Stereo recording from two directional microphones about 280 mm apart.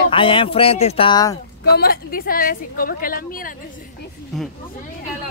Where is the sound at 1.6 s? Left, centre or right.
Left.